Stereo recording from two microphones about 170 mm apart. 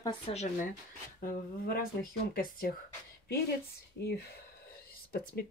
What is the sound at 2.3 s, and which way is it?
Speech, 60° left (ahead or behind).